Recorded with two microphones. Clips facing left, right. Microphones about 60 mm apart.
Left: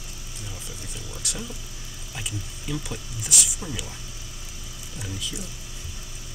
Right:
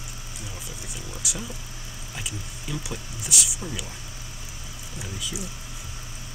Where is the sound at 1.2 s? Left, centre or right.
Centre.